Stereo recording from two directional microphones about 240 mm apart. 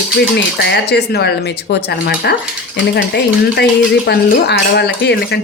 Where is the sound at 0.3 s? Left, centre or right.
Left.